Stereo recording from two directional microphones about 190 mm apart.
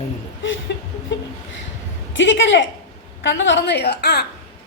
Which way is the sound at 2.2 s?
70° left (ahead or behind).